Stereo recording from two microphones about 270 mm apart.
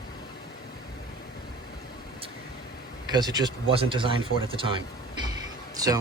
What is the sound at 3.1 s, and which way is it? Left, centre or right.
Speech, centre.